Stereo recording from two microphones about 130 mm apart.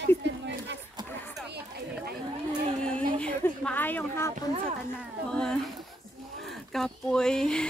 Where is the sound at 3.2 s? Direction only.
10° left (ahead or behind).